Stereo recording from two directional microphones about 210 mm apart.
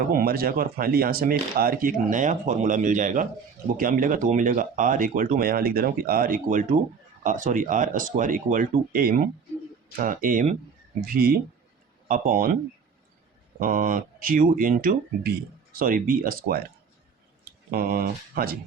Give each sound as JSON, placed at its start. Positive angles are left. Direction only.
{"t": 0.1, "sound": "speech", "side_deg": -45}
{"t": 13.6, "sound": "speech", "side_deg": -40}
{"t": 17.7, "sound": "speech", "side_deg": -45}